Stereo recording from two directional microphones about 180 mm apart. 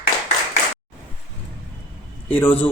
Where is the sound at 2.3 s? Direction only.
10° left (ahead or behind).